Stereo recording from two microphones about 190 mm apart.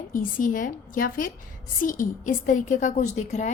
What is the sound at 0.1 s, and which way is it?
A woman's voice, 45° left (ahead or behind).